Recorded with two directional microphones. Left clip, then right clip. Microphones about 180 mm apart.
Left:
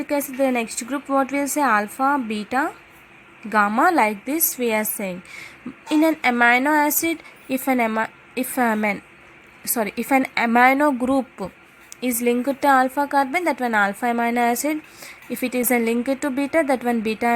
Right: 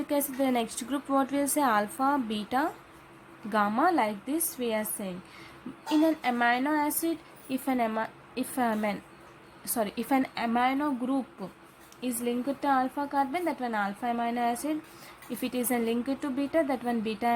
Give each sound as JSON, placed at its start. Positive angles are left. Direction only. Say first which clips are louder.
{"t": 0.1, "sound": "a woman's voice", "louder": "left 7 dB", "side_deg": 15}